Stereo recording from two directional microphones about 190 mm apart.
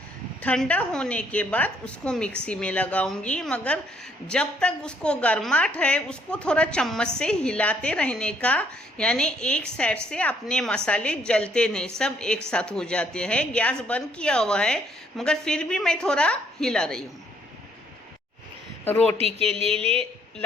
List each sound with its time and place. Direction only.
0.4 s a woman's voice: 5° left (ahead or behind)
18.9 s speech: 10° left (ahead or behind)
19.1 s speech: 30° right (ahead or behind)